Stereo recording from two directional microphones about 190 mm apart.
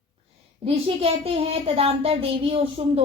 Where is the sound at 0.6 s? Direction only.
30° right (ahead or behind).